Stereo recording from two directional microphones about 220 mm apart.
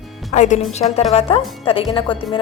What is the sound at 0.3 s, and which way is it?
A woman's voice, 35° left (ahead or behind).